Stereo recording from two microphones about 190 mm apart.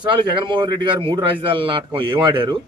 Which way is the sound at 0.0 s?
25° right (ahead or behind).